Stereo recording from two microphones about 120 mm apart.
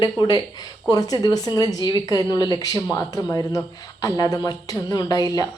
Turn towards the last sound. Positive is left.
turn(degrees=30)  # may be behind; listen again after turning